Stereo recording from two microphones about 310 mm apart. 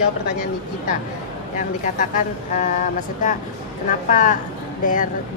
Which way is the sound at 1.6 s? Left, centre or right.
Left.